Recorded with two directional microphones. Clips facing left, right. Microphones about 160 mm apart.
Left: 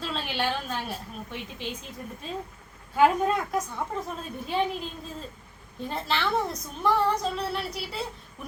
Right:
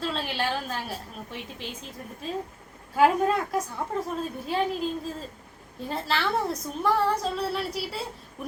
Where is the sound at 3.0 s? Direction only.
5° right (ahead or behind).